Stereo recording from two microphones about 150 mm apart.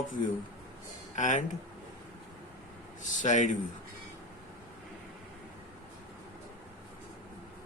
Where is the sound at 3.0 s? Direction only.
55° left (ahead or behind).